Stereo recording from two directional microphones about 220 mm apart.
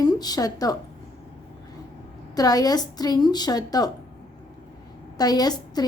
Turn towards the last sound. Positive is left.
turn(degrees=15)  # may be behind; listen again after turning